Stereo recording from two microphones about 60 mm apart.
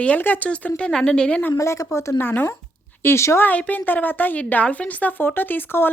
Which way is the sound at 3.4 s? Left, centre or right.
Left.